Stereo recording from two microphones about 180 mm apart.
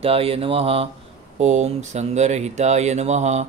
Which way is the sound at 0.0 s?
35° right (ahead or behind).